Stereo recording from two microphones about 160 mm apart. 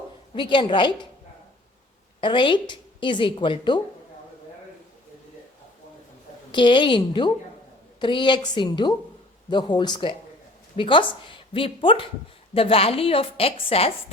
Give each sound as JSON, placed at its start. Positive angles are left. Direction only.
{"t": 0.3, "sound": "a woman's voice", "side_deg": 30}
{"t": 2.2, "sound": "a woman's voice", "side_deg": 30}
{"t": 6.5, "sound": "a woman's voice", "side_deg": 30}